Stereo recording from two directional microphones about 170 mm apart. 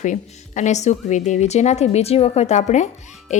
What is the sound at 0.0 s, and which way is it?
A woman's voice, 45° left (ahead or behind).